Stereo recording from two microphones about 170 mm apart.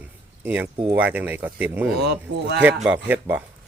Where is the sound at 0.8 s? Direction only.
10° right (ahead or behind).